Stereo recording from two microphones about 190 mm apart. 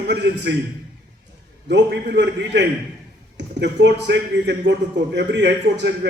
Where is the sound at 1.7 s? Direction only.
65° right (ahead or behind).